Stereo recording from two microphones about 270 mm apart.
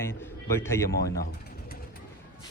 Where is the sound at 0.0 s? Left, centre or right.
Centre.